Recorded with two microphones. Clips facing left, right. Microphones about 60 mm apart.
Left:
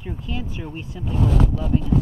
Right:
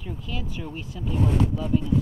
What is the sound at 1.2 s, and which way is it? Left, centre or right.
Speech, left.